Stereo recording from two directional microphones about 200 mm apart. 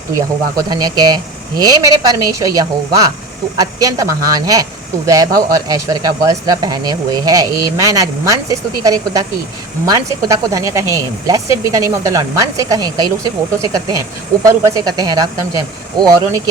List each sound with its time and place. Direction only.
0.7 s a woman's voice: 20° right (ahead or behind)